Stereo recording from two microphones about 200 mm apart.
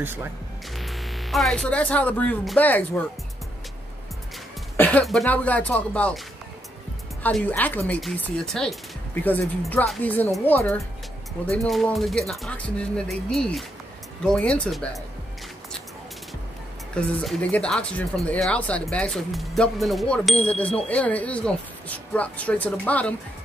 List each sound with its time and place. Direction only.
0.0 s speech: 10° right (ahead or behind)
0.7 s speech: centre (ahead or behind)
4.7 s speech: 10° left (ahead or behind)
7.2 s speech: 10° left (ahead or behind)
16.9 s speech: 5° left (ahead or behind)